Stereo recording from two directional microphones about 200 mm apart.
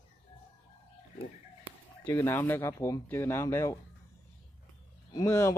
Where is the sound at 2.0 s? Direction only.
15° left (ahead or behind).